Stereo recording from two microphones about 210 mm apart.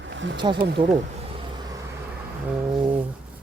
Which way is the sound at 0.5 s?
50° right (ahead or behind).